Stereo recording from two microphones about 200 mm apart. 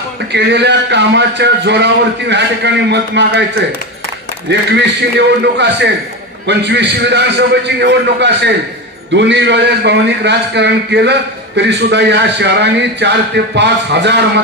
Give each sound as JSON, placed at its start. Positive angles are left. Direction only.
{"t": 0.3, "sound": "a man's voice", "side_deg": -55}
{"t": 4.5, "sound": "a man's voice", "side_deg": -60}